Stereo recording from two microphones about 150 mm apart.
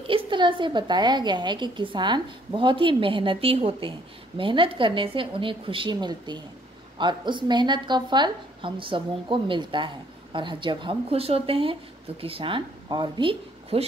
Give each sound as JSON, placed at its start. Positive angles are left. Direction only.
{"t": 0.0, "sound": "a woman's voice", "side_deg": -35}